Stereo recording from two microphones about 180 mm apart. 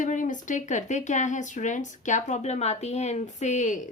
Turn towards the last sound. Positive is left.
turn(degrees=45)  # may be behind; listen again after turning